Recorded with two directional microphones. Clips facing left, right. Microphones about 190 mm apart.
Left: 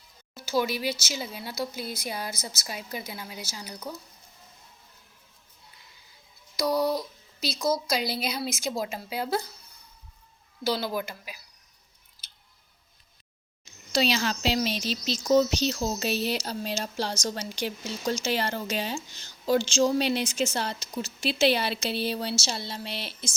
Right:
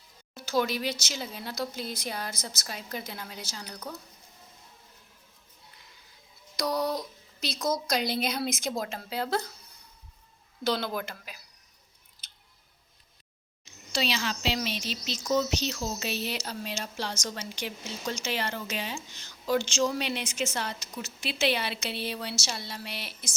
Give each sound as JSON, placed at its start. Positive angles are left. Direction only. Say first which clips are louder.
{"t": 0.3, "sound": "a woman's voice", "louder": "left 1 dB", "side_deg": 5}
{"t": 6.6, "sound": "a woman's voice", "louder": "left 3 dB", "side_deg": 5}
{"t": 10.6, "sound": "a woman's voice", "louder": "left 1 dB", "side_deg": 5}
{"t": 12.2, "sound": "scissors", "louder": "left 1 dB", "side_deg": 0}
{"t": 13.9, "sound": "speech", "louder": "left 5 dB", "side_deg": 40}